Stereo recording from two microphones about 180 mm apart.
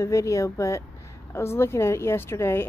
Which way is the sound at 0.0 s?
15° left (ahead or behind).